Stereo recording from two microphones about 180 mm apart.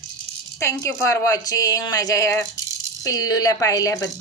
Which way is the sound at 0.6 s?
15° left (ahead or behind).